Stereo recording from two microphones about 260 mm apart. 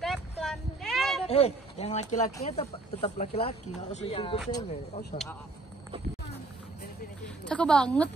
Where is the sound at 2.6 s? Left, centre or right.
Left.